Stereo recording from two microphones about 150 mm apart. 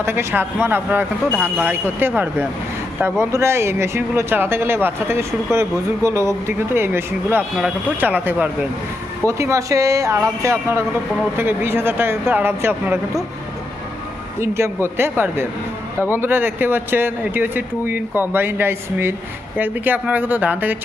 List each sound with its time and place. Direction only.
0.0 s speech: 15° right (ahead or behind)
14.3 s speech: 20° right (ahead or behind)